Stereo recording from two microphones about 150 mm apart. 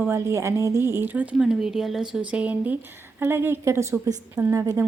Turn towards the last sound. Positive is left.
turn(degrees=-20)  # may be behind; listen again after turning